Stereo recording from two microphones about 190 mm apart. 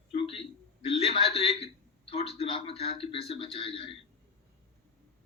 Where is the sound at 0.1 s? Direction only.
30° left (ahead or behind).